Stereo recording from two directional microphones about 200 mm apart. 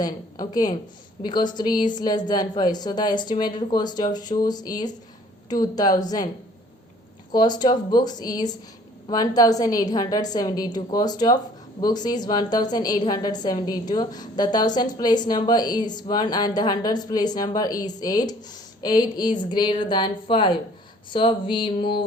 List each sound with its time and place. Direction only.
0.0 s a woman's voice: 20° left (ahead or behind)
7.3 s a woman's voice: 20° left (ahead or behind)